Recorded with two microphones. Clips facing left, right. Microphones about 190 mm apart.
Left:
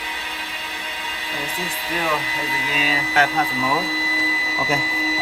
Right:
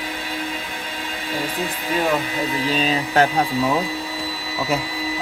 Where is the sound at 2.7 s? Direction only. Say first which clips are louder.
Right 2 dB; 35° right (ahead or behind).